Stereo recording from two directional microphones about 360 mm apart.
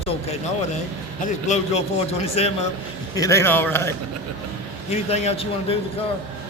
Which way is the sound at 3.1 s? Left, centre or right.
Centre.